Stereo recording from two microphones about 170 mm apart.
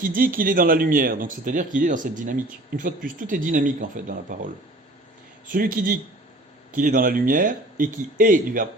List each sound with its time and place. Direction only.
0.0 s a man's voice: 55° right (ahead or behind)